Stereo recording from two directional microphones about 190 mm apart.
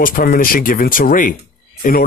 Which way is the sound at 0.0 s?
45° left (ahead or behind).